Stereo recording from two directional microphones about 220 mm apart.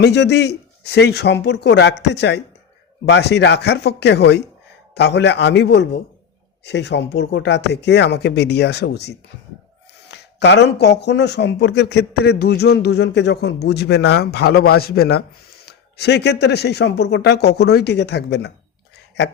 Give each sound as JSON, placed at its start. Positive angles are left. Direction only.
{"t": 0.0, "sound": "speech", "side_deg": 50}